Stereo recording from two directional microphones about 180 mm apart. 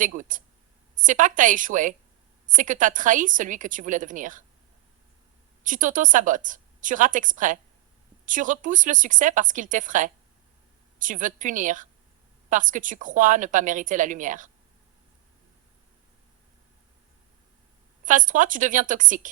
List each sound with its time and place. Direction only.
0.2 s a woman's voice: 45° right (ahead or behind)
5.6 s a woman's voice: 45° right (ahead or behind)
18.0 s a woman's voice: 45° right (ahead or behind)